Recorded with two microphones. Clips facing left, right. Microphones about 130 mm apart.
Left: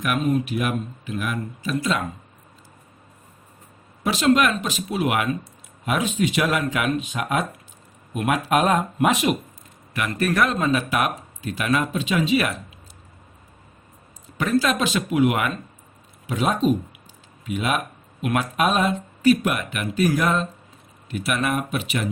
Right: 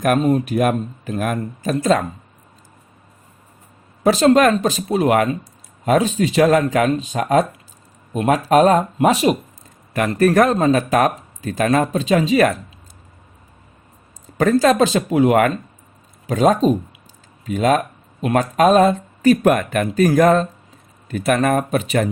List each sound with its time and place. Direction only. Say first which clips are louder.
0.0 s speech: right 6 dB; 40° right (ahead or behind)
4.0 s speech: right 6 dB; 40° right (ahead or behind)
14.3 s speech: right 7 dB; 40° right (ahead or behind)